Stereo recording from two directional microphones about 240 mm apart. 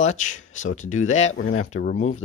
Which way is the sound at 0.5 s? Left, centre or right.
Left.